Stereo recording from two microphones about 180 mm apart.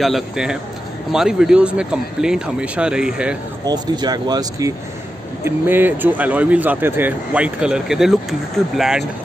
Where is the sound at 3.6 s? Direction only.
25° right (ahead or behind).